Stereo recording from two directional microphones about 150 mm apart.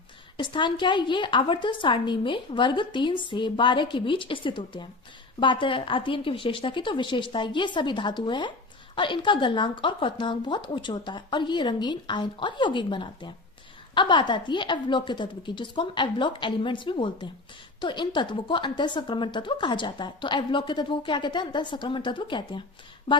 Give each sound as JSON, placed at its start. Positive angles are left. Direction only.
{"t": 0.3, "sound": "a woman's voice", "side_deg": 35}